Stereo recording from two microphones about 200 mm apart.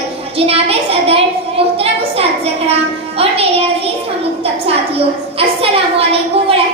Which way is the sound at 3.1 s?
30° right (ahead or behind).